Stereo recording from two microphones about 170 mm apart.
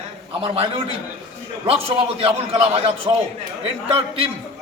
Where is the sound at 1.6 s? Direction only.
35° right (ahead or behind).